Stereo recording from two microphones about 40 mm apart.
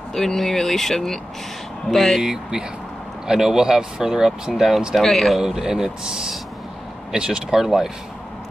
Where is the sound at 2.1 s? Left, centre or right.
Right.